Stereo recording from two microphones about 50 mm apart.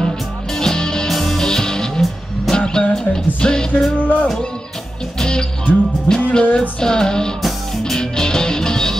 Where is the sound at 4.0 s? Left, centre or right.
Left.